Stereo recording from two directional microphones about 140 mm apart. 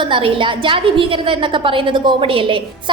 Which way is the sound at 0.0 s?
40° right (ahead or behind).